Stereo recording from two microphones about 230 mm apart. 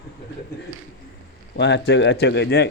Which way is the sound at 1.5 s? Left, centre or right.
Left.